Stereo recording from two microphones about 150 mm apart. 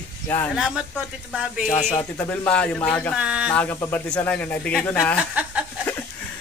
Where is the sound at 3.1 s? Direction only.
5° right (ahead or behind).